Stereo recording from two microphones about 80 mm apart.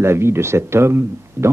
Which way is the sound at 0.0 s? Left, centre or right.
Right.